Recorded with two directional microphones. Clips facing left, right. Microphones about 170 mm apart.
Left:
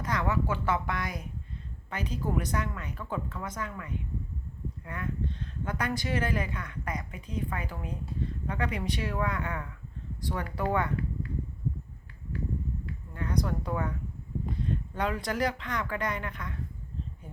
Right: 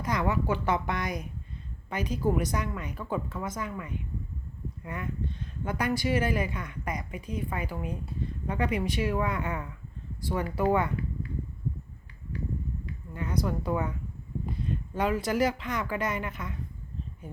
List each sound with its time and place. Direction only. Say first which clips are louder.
0.0 s speech: right 2 dB; 10° right (ahead or behind)
13.1 s speech: right 1 dB; 5° right (ahead or behind)
14.9 s speech: right 5 dB; 5° right (ahead or behind)